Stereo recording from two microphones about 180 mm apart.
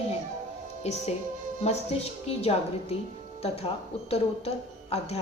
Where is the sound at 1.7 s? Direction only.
35° left (ahead or behind).